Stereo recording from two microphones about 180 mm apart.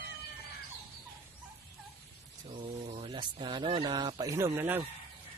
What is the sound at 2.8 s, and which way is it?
Speech, 30° right (ahead or behind).